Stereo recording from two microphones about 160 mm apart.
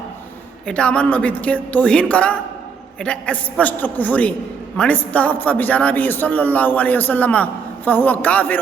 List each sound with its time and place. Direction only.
0.7 s a man's voice: 5° left (ahead or behind)